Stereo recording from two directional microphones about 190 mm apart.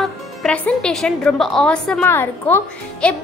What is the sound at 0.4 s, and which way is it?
A woman's voice, 5° left (ahead or behind).